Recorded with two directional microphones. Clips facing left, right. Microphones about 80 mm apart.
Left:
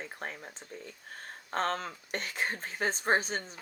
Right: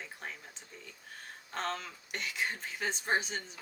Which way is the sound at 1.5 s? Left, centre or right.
Left.